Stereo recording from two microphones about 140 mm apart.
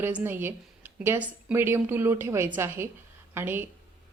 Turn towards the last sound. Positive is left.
turn(degrees=-15)  # may be behind; listen again after turning